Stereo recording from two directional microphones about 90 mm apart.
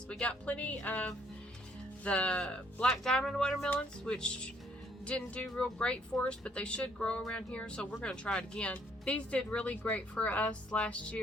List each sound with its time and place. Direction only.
0.1 s speech: 15° left (ahead or behind)